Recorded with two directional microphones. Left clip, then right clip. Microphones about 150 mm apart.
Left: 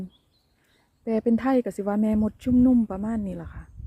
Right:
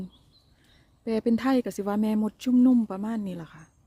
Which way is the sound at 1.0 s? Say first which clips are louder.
Left 2 dB; 15° right (ahead or behind).